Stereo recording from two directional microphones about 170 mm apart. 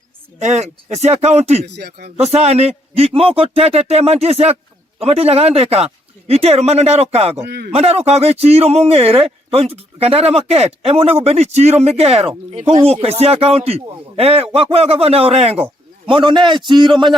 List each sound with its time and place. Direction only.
0.3 s speech: 40° right (ahead or behind)
1.6 s speech: 75° right (ahead or behind)
2.3 s speech: 40° right (ahead or behind)
7.4 s speech: 75° right (ahead or behind)
7.7 s a man's voice: 35° right (ahead or behind)